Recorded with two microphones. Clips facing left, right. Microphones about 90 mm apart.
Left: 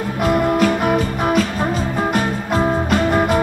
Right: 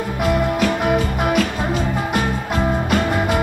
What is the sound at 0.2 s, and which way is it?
Music, 45° left (ahead or behind).